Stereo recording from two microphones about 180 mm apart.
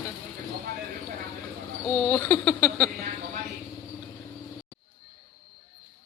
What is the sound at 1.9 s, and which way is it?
Speech, 10° left (ahead or behind).